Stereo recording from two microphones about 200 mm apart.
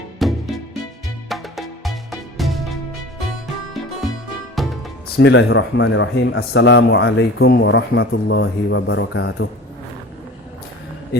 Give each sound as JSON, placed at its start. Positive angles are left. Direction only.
{"t": 0.2, "sound": "music", "side_deg": 0}
{"t": 4.6, "sound": "music", "side_deg": 0}
{"t": 5.1, "sound": "speech", "side_deg": 65}